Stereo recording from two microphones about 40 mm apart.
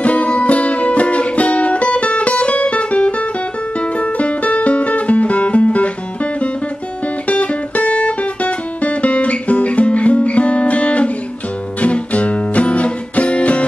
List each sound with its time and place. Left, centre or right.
0.0 s music: left
7.2 s music: left